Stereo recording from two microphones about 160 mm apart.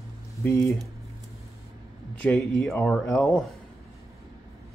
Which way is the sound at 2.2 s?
5° left (ahead or behind).